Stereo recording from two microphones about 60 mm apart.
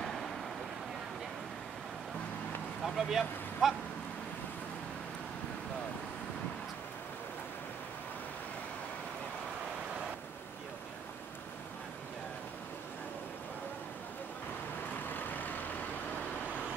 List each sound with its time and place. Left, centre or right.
0.0 s vehicle: centre
2.8 s speech: centre
15.0 s vehicle: left